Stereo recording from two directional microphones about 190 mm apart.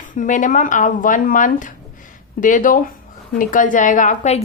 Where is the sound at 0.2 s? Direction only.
40° left (ahead or behind).